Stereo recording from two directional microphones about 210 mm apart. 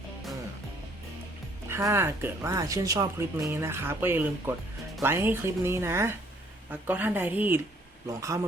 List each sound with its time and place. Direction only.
1.7 s speech: 10° right (ahead or behind)